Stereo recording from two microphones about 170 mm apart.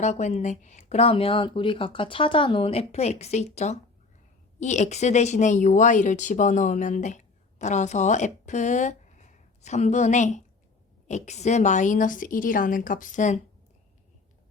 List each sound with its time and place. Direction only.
0.0 s speech: 45° left (ahead or behind)